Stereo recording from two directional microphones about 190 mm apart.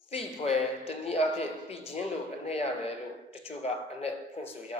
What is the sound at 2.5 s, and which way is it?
A man's voice, 35° left (ahead or behind).